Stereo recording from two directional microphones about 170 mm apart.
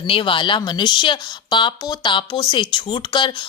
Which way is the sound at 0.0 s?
30° left (ahead or behind).